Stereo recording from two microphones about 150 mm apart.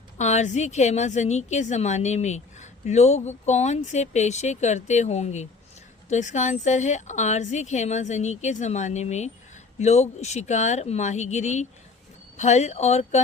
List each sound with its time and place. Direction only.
0.2 s a woman's voice: 50° left (ahead or behind)